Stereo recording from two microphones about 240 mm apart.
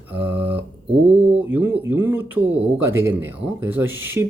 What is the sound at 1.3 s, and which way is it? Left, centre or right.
Speech, centre.